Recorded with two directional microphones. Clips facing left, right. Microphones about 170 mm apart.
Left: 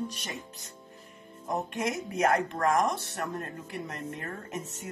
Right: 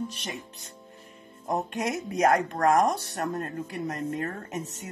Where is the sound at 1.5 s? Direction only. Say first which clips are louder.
Right 2 dB; 40° right (ahead or behind).